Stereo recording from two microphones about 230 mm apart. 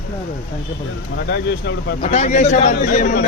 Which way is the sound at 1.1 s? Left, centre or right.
Left.